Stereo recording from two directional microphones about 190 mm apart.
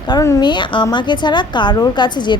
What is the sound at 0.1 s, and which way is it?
A woman's voice, 20° left (ahead or behind).